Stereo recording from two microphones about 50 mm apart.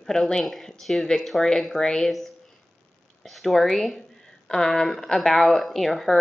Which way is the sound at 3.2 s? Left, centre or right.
Centre.